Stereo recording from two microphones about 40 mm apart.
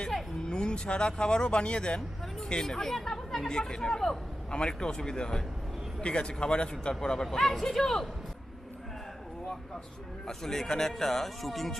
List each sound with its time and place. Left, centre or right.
0.4 s speech: left
2.4 s speech: centre
3.5 s speech: centre
4.5 s speech: left
10.2 s speech: centre